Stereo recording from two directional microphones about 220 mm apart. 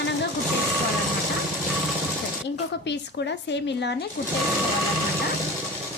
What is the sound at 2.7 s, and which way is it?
Speech, 50° left (ahead or behind).